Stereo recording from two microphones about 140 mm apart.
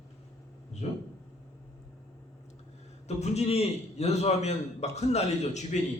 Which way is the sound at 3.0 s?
50° left (ahead or behind).